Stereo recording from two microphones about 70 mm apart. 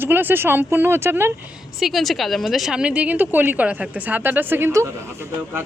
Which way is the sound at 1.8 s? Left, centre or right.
Centre.